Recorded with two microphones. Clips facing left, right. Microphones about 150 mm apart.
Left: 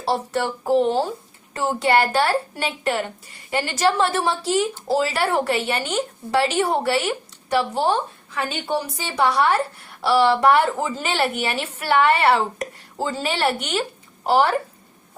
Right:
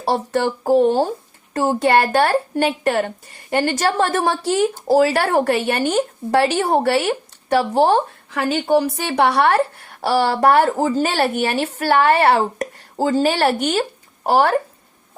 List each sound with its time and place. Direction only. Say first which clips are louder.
0.8 s a woman's voice: right 4 dB; 45° right (ahead or behind)
10.0 s a woman's voice: even; 45° right (ahead or behind)